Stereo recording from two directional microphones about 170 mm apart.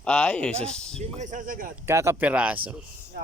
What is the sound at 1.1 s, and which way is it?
Speech, 50° right (ahead or behind).